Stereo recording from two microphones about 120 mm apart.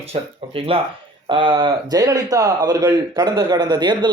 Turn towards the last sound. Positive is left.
turn(degrees=-35)  # may be behind; listen again after turning